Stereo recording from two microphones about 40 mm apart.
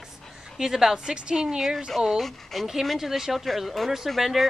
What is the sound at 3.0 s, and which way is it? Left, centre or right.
Speech, centre.